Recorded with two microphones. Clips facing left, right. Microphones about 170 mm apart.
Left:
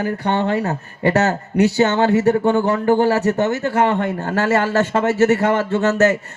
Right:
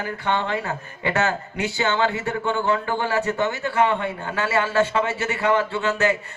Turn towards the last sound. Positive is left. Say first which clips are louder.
# left 6 dB
turn(degrees=45)  # may be behind; listen again after turning